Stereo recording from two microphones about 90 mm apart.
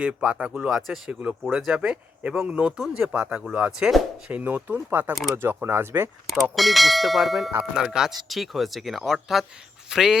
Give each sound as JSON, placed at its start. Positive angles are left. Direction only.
{"t": 0.0, "sound": "speech", "side_deg": -15}
{"t": 6.2, "sound": "speech", "side_deg": 0}